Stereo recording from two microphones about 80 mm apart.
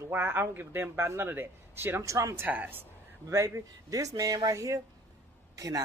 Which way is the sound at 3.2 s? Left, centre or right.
Right.